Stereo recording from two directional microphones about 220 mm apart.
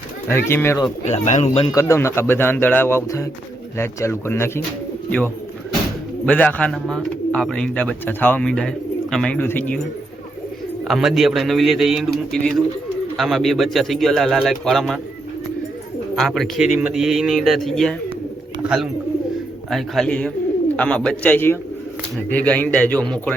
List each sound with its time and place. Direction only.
0.3 s speech: 10° left (ahead or behind)
1.0 s speech: 30° left (ahead or behind)
1.7 s speech: 15° left (ahead or behind)
6.2 s speech: 5° left (ahead or behind)
10.8 s speech: centre (ahead or behind)
16.1 s speech: centre (ahead or behind)